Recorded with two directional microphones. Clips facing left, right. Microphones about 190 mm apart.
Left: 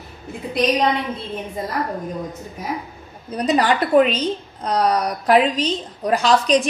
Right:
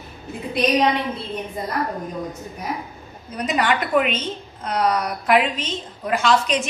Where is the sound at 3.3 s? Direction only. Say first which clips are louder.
Left 4 dB; 35° left (ahead or behind).